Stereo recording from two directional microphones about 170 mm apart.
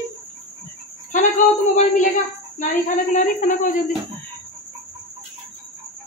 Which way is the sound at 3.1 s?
50° left (ahead or behind).